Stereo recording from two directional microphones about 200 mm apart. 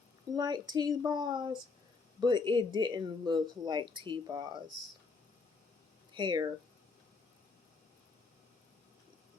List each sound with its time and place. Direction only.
0.3 s speech: 20° right (ahead or behind)
6.1 s speech: 20° right (ahead or behind)